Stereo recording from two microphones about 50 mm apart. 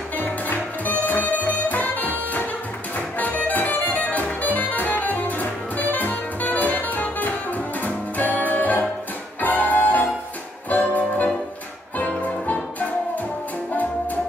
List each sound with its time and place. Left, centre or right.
0.2 s music: left